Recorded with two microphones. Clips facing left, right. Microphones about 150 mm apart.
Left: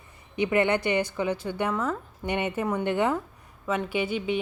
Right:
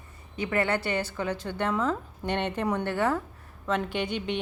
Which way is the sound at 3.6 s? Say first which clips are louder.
Left 1 dB; 5° left (ahead or behind).